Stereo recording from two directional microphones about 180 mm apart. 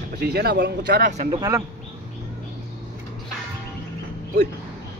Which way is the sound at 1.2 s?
20° right (ahead or behind).